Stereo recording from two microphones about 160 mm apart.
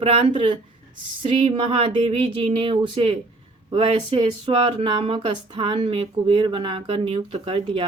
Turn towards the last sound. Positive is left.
turn(degrees=-35)  # may be behind; listen again after turning